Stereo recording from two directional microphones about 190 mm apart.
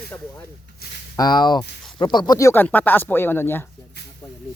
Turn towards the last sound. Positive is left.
turn(degrees=15)  # may be behind; listen again after turning